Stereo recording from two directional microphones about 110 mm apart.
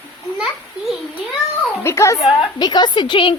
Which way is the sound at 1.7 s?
20° left (ahead or behind).